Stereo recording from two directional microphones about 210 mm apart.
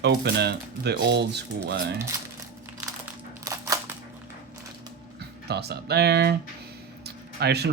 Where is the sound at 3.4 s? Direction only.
15° right (ahead or behind).